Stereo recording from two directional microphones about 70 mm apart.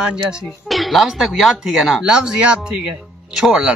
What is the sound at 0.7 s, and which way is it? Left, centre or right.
A man's voice, centre.